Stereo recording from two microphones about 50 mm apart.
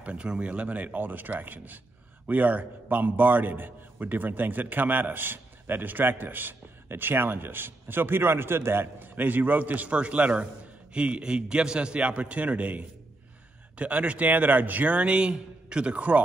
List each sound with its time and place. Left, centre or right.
0.0 s a man's voice: right